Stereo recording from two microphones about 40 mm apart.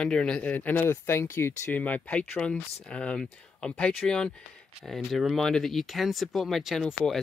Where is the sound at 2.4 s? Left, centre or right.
Left.